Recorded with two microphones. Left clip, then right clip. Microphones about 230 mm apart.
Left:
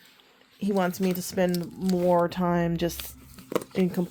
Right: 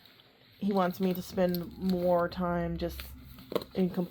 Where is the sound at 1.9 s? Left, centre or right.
Left.